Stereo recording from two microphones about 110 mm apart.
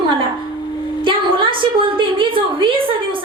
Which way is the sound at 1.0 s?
50° right (ahead or behind).